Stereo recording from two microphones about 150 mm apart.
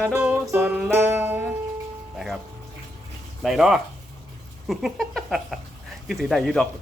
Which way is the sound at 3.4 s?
5° right (ahead or behind).